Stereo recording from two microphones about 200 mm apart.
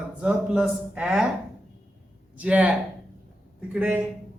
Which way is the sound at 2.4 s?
5° right (ahead or behind).